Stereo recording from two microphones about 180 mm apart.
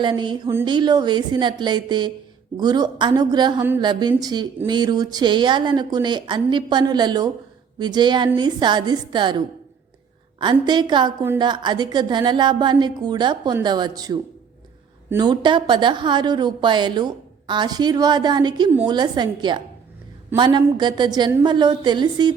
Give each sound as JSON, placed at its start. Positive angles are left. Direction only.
{"t": 0.0, "sound": "speech", "side_deg": -25}
{"t": 15.2, "sound": "speech", "side_deg": -25}